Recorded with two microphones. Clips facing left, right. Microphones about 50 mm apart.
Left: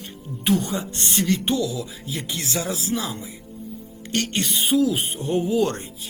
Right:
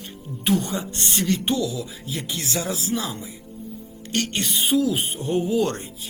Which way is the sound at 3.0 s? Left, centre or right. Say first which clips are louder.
Even; left.